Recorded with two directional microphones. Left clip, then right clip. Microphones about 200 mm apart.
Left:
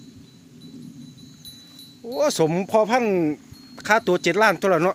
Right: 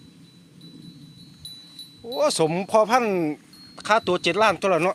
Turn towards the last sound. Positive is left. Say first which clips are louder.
# left 2 dB
turn(degrees=25)  # may be behind; listen again after turning